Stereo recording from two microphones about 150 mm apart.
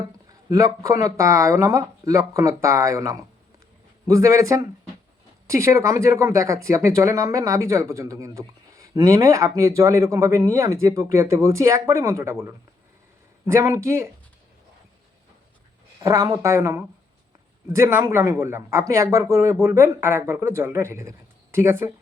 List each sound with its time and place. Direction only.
0.3 s speech: 20° right (ahead or behind)
16.0 s speech: 20° right (ahead or behind)